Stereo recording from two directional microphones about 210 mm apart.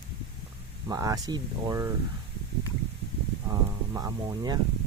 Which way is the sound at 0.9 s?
15° right (ahead or behind).